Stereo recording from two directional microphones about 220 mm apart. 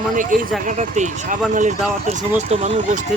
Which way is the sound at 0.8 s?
35° right (ahead or behind).